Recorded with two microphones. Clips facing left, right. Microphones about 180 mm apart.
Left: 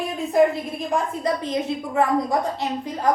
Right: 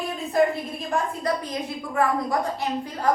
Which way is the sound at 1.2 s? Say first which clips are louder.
Left 3 dB; 20° left (ahead or behind).